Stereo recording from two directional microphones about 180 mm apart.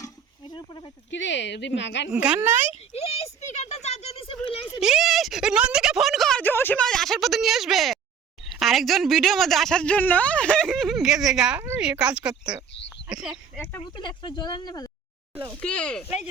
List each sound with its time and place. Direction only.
0.0 s wild animals: 25° left (ahead or behind)
1.1 s speech: 85° left
2.1 s speech: 5° right (ahead or behind)
3.1 s a sound: 40° left (ahead or behind)
4.8 s speech: 5° right (ahead or behind)
13.9 s speech: 25° left (ahead or behind)
15.6 s speech: 5° left (ahead or behind)